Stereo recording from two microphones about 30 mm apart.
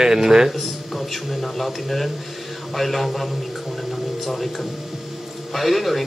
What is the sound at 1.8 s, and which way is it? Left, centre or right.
Speech, centre.